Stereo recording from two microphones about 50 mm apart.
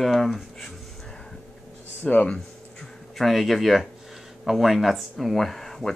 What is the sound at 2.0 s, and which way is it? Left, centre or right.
Speech, left.